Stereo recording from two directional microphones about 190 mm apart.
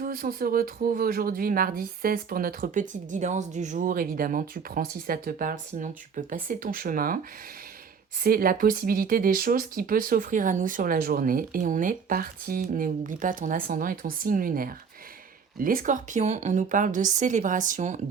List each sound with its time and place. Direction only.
0.0 s speech: 50° right (ahead or behind)
8.2 s a woman's voice: 50° right (ahead or behind)